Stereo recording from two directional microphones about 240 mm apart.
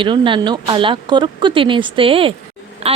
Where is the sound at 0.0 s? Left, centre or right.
Centre.